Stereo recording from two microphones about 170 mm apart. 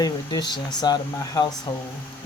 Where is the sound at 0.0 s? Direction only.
25° left (ahead or behind).